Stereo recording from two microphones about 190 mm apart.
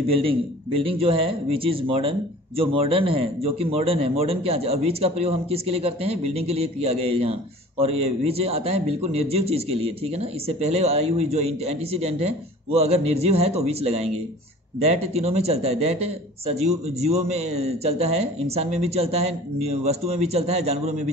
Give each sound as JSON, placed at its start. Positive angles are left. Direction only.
{"t": 0.2, "sound": "speech", "side_deg": -30}